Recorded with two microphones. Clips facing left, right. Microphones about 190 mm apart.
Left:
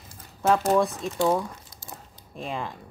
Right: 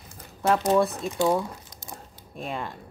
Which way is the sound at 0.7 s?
Centre (ahead or behind).